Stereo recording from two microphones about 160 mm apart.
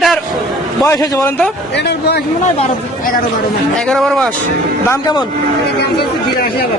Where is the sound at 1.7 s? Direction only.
90° left.